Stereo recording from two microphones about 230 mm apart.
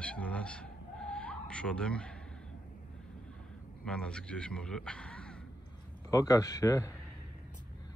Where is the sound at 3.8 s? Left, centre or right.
Centre.